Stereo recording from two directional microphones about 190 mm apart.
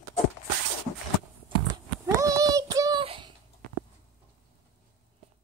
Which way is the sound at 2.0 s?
15° right (ahead or behind).